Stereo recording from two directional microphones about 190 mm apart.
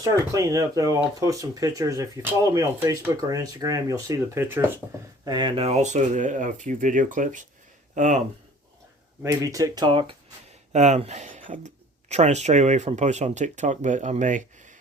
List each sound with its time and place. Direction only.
0.0 s speech: 15° right (ahead or behind)
5.2 s speech: 25° right (ahead or behind); by 8.2 s 40° right (ahead or behind)
9.2 s speech: 15° right (ahead or behind)
10.7 s speech: 35° right (ahead or behind)